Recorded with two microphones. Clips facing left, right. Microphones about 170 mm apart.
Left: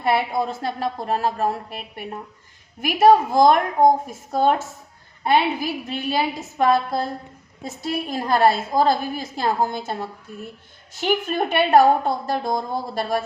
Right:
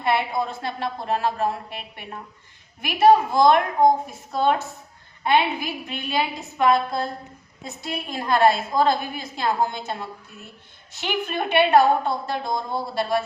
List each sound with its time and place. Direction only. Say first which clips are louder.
0.0 s a woman's voice: left 2 dB; 40° left (ahead or behind)
2.8 s a woman's voice: left 1 dB; 45° left (ahead or behind)